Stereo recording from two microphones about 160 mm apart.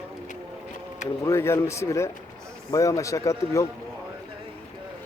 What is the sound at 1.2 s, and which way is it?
A man's voice, 15° left (ahead or behind).